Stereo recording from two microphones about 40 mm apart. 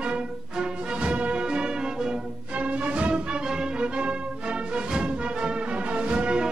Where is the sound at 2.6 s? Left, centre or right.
Right.